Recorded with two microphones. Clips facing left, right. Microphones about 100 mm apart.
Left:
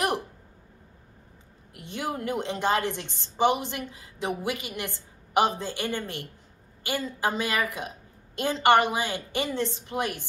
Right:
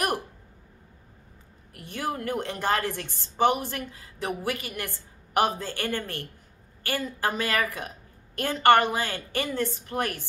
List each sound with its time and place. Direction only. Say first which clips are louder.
1.7 s a woman's voice: right 1 dB; 20° left (ahead or behind)